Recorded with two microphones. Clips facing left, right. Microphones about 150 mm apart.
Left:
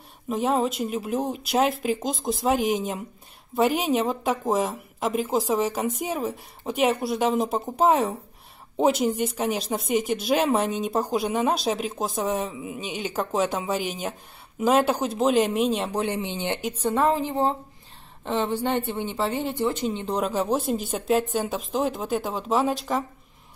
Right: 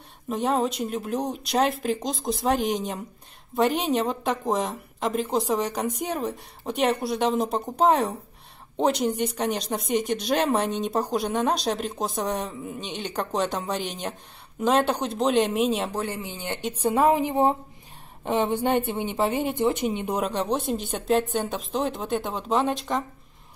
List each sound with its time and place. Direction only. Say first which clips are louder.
0.3 s speech: left 1 dB; centre (ahead or behind)
15.9 s speech: left 4 dB; 20° left (ahead or behind)
16.8 s a woman's voice: right 2 dB; 10° right (ahead or behind)
20.2 s speech: left 4 dB; centre (ahead or behind)